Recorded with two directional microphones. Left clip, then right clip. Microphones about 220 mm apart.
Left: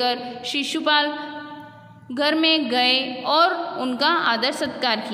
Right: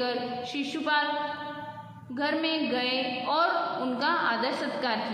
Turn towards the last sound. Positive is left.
turn(degrees=50)  # may be behind; listen again after turning